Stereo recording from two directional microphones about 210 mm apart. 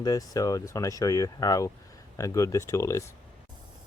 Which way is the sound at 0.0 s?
15° left (ahead or behind).